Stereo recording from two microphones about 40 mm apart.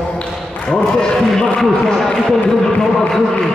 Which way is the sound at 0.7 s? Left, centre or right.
Centre.